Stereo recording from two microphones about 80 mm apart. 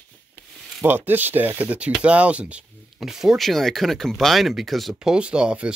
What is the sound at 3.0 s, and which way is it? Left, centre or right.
Speech, centre.